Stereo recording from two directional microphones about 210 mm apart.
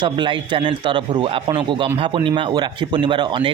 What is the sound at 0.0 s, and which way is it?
Speech, 20° right (ahead or behind).